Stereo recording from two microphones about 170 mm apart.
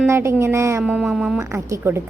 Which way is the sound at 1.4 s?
15° right (ahead or behind).